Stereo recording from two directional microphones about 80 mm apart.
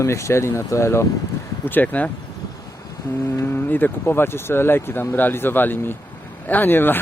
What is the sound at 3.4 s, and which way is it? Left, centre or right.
Speech, left.